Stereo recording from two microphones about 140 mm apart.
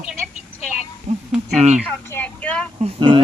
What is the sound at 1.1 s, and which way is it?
Speech, 50° right (ahead or behind).